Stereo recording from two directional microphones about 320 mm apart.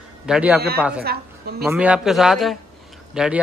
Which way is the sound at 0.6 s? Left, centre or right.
Right.